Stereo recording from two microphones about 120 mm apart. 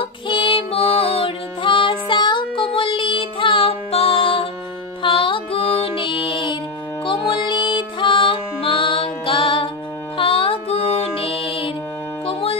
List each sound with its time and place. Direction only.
0.0 s music: 45° left (ahead or behind)